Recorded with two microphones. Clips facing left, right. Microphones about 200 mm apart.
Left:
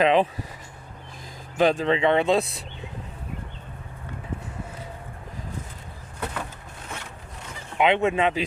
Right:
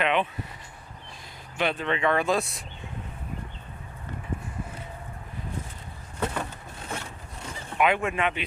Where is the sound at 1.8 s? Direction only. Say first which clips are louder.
Left 4 dB; 25° left (ahead or behind).